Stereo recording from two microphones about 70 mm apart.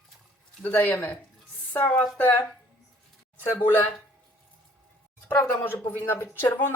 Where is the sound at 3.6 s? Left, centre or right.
Left.